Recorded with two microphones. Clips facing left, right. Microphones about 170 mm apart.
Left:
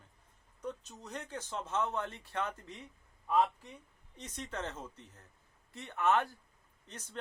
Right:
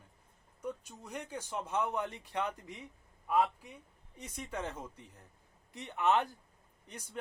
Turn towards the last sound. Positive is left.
turn(degrees=-10)  # may be behind; listen again after turning